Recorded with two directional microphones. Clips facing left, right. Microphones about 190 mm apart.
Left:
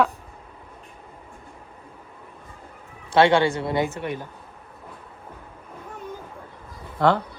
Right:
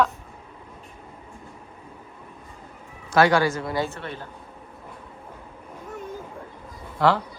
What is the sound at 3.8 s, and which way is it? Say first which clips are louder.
Speech: left 3 dB; 15° left (ahead or behind).